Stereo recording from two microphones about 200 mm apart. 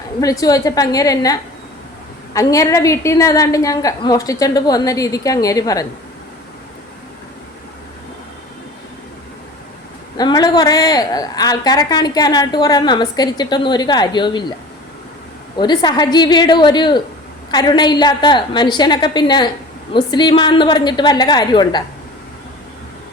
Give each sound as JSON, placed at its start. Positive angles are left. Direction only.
{"t": 0.2, "sound": "a woman's voice", "side_deg": 20}
{"t": 10.2, "sound": "a woman's voice", "side_deg": 20}
{"t": 15.5, "sound": "a woman's voice", "side_deg": 20}